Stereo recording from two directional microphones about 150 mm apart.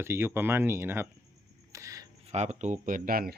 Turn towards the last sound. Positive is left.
turn(degrees=-80)